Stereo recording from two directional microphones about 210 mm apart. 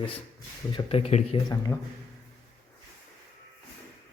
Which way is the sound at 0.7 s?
25° left (ahead or behind).